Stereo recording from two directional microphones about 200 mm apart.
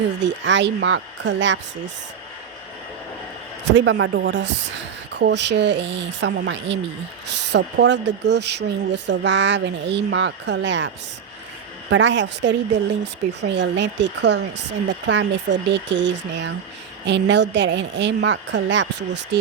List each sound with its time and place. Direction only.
0.4 s speech: 65° right (ahead or behind)
3.7 s speech: 65° right (ahead or behind)